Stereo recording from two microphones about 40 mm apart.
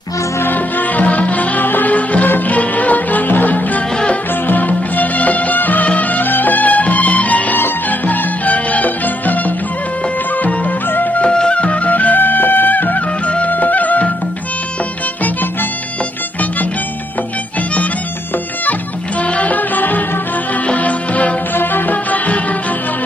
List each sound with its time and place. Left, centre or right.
0.4 s music: left
2.2 s music: left
2.5 s music: left
7.5 s music: left
8.5 s music: left
10.4 s music: left
11.1 s music: left
19.3 s music: left
20.6 s music: left
21.5 s music: left
22.1 s music: left